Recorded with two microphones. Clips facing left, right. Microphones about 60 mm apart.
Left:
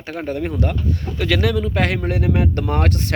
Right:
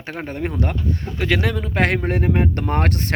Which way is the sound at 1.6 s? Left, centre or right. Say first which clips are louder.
Right 1 dB; right.